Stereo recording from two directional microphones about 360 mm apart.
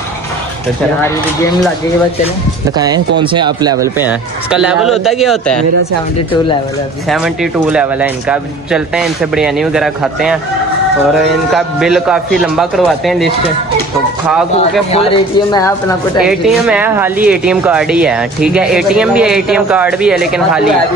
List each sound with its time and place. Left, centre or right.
1.0 s speech: centre
3.2 s speech: centre
7.7 s speech: centre
11.5 s speech: centre
14.9 s speech: centre
16.3 s speech: centre